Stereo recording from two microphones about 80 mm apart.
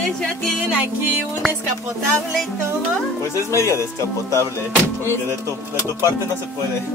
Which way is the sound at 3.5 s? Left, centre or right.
Left.